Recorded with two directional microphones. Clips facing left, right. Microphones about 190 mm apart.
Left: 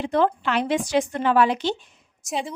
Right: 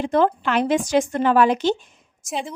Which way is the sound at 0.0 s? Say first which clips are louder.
Right 2 dB; 45° right (ahead or behind).